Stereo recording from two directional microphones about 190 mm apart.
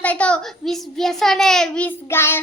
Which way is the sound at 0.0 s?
5° left (ahead or behind).